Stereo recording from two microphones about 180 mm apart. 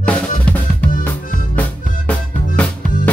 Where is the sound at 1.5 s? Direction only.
10° left (ahead or behind).